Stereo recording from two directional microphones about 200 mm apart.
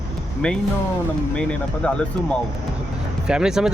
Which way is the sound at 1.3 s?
5° left (ahead or behind).